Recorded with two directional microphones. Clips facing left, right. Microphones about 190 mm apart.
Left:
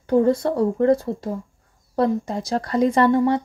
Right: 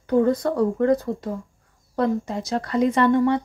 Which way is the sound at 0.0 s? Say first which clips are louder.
Left 2 dB; 30° left (ahead or behind).